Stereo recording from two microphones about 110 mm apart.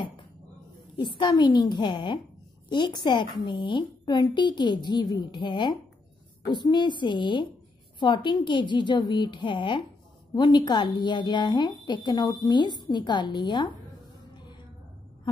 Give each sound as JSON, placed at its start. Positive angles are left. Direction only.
{"t": 0.9, "sound": "a woman's voice", "side_deg": 45}